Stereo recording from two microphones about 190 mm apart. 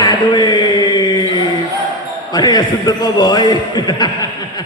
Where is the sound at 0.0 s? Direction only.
20° left (ahead or behind).